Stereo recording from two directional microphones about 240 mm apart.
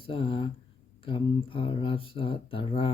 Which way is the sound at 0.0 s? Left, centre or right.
Left.